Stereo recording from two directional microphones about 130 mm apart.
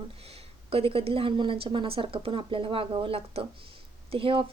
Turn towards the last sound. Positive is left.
turn(degrees=-45)  # may be behind; listen again after turning